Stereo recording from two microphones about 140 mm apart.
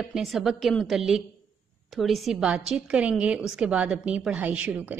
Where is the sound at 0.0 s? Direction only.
Centre (ahead or behind).